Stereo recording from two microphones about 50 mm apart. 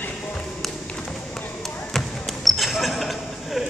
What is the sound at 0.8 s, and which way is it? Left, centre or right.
Tap, left.